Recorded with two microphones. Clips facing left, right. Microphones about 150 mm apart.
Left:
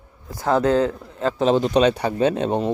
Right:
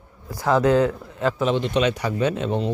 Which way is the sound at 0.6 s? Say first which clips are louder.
Right 1 dB; 30° left (ahead or behind).